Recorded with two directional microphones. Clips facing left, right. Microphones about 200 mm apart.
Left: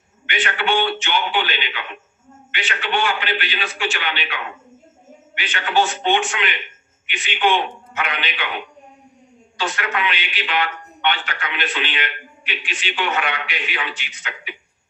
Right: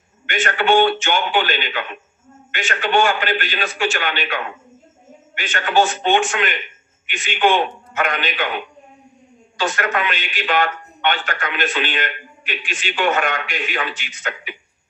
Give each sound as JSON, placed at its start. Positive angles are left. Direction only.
{"t": 0.3, "sound": "a man's voice", "side_deg": -45}
{"t": 9.6, "sound": "a man's voice", "side_deg": -45}